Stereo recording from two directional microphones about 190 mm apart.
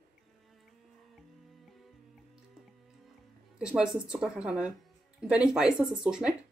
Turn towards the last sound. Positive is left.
turn(degrees=-5)  # may be behind; listen again after turning